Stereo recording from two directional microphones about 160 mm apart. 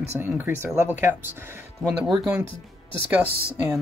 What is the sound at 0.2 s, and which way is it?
Speech, 10° right (ahead or behind).